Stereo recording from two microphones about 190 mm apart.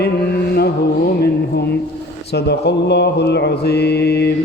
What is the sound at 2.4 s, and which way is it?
A man's voice, 60° left (ahead or behind).